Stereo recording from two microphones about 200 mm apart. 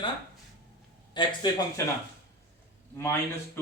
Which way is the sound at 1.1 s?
20° left (ahead or behind).